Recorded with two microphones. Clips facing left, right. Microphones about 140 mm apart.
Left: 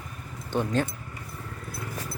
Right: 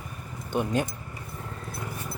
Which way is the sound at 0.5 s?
10° right (ahead or behind).